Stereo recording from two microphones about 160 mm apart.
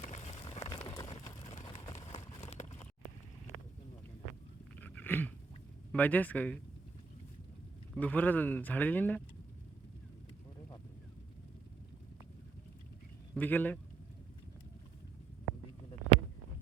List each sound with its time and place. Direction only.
0.0 s a sound: 45° left (ahead or behind)
4.8 s dog: 10° left (ahead or behind)
5.9 s speech: 10° left (ahead or behind)
7.9 s speech: 10° left (ahead or behind)
13.3 s speech: 10° left (ahead or behind)